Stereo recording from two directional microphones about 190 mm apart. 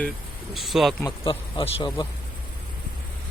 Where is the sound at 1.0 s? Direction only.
25° left (ahead or behind).